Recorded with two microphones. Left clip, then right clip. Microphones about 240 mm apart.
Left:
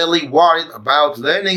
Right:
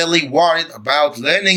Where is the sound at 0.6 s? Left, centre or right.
Right.